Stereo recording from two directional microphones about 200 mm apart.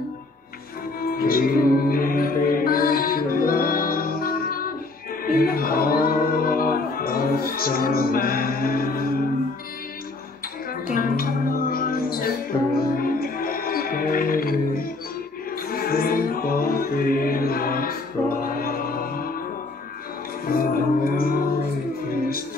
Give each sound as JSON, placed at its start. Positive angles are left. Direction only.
{"t": 1.0, "sound": "music", "side_deg": 45}
{"t": 10.7, "sound": "music", "side_deg": 45}
{"t": 20.4, "sound": "music", "side_deg": 45}